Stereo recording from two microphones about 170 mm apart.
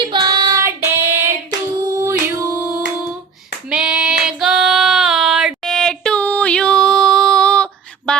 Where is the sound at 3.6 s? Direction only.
5° right (ahead or behind).